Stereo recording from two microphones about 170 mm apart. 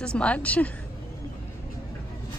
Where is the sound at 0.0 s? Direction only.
5° left (ahead or behind).